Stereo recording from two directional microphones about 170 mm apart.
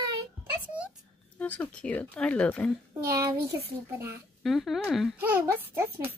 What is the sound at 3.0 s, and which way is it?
Speech, 15° right (ahead or behind).